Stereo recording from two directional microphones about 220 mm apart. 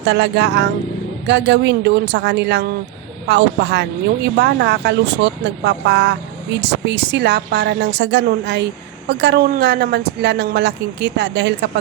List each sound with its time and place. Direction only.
0.0 s speech: 50° right (ahead or behind)